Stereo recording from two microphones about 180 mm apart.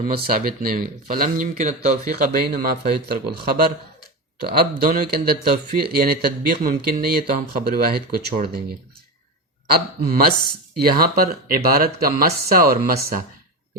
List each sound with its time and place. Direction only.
0.0 s speech: 55° right (ahead or behind)
9.6 s speech: 60° right (ahead or behind)